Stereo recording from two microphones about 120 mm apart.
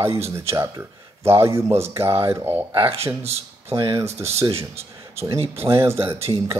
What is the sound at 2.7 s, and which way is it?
Speech, 50° right (ahead or behind).